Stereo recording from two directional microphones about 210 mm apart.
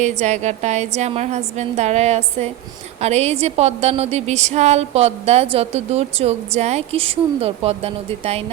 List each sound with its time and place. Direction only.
0.0 s a woman's voice: 35° right (ahead or behind)